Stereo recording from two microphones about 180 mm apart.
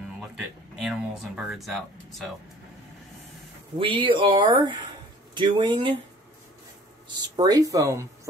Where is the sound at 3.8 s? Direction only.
30° right (ahead or behind).